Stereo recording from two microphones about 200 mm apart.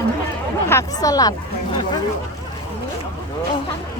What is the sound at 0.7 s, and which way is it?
Speech, 15° left (ahead or behind).